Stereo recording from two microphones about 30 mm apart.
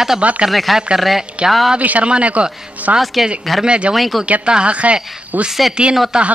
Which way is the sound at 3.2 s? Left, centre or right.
Centre.